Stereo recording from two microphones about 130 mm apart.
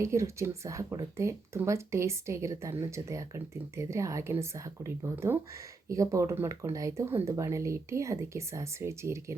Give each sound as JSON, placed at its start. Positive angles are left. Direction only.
{"t": 0.0, "sound": "speech", "side_deg": -20}